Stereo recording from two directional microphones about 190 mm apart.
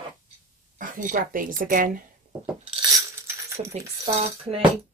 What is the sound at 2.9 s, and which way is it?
Coin, 15° right (ahead or behind).